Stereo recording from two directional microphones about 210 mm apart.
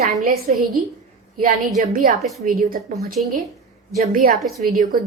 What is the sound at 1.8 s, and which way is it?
A woman's voice, 40° right (ahead or behind).